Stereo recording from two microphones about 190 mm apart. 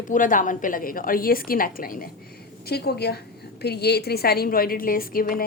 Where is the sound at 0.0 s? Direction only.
45° left (ahead or behind).